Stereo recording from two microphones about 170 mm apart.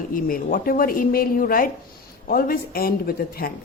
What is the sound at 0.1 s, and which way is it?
A woman's voice, 55° left (ahead or behind).